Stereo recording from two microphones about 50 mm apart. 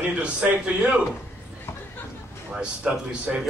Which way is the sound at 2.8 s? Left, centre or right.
Right.